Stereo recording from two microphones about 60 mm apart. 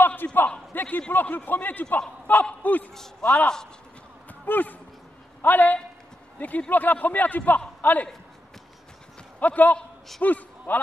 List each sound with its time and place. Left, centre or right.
0.0 s a sound: left
0.7 s a man's voice: left
2.9 s speech: centre
3.3 s a man's voice: left
4.3 s a sound: left
5.4 s a man's voice: left
9.4 s a man's voice: left
9.8 s a sound: centre
10.2 s a man's voice: left